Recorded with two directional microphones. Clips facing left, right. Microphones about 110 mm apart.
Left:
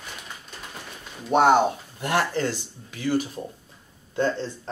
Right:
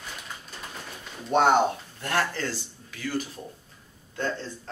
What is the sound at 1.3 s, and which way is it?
Speech, 5° left (ahead or behind).